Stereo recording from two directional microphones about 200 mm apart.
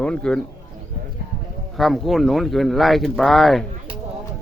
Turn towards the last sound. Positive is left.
turn(degrees=0)  # may be behind; listen again after turning